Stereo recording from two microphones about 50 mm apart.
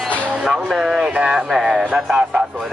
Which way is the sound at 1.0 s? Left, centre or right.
Centre.